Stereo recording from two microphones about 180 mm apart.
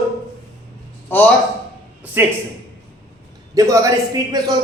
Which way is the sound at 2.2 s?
15° right (ahead or behind).